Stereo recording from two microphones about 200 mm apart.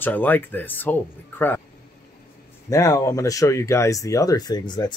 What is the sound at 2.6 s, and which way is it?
Speech, 15° left (ahead or behind).